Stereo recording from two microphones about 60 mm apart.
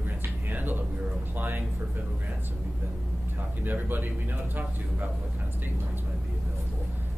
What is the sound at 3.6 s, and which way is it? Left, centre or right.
Speech, right.